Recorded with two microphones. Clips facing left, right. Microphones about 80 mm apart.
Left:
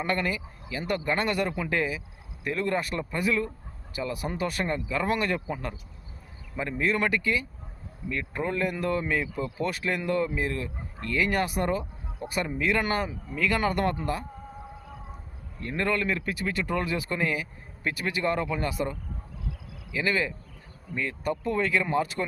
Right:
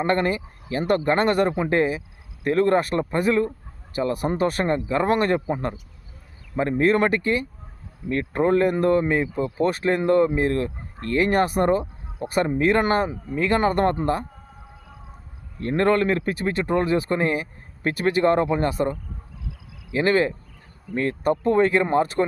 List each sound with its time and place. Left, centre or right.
0.0 s speech: right
15.6 s speech: right